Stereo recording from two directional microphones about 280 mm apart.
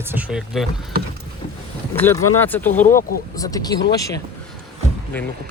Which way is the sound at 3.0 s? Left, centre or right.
Left.